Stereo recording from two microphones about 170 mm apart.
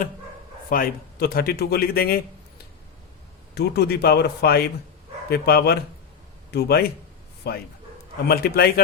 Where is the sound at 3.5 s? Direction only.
70° left (ahead or behind).